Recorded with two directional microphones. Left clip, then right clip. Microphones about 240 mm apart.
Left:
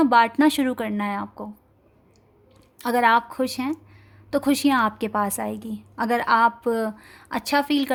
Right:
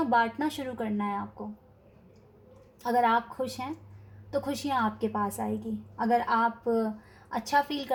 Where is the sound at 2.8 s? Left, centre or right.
Left.